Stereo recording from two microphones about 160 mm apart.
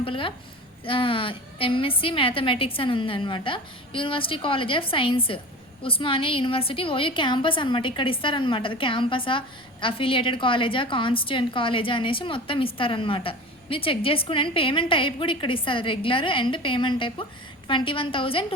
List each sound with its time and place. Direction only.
0.0 s a woman's voice: 35° left (ahead or behind)